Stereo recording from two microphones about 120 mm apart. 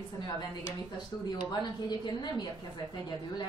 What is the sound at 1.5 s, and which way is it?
Speech, 35° left (ahead or behind).